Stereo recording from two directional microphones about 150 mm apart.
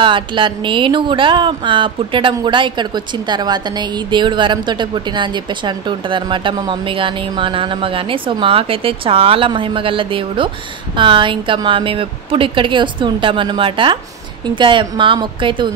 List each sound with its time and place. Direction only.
0.0 s a woman's voice: 35° right (ahead or behind)